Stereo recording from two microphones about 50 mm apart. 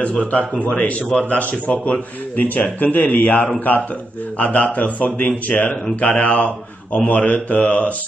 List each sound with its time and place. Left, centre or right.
0.2 s speech: left
2.3 s speech: left